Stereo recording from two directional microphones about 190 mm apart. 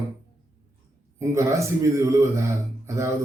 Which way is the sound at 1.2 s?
15° right (ahead or behind).